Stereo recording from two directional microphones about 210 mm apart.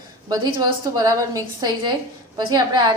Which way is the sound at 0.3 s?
20° right (ahead or behind).